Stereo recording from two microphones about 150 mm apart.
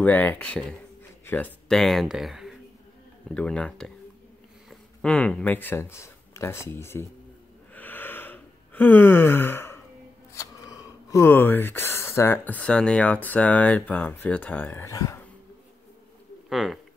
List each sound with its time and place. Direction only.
0.0 s speech: 10° left (ahead or behind)
7.7 s gasp: 10° left (ahead or behind)
10.3 s speech: 20° left (ahead or behind)
16.4 s speech: centre (ahead or behind)